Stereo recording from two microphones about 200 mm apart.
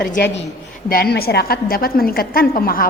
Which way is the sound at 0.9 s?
50° left (ahead or behind).